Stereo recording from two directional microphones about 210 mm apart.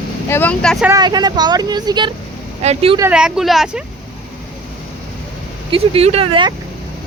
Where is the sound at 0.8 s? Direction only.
20° right (ahead or behind).